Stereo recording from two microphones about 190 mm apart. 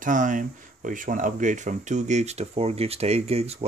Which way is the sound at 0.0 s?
45° right (ahead or behind).